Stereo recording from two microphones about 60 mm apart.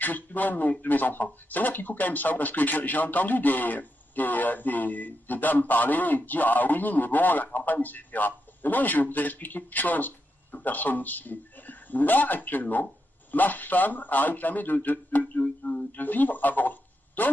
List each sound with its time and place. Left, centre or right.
0.0 s a man's voice: left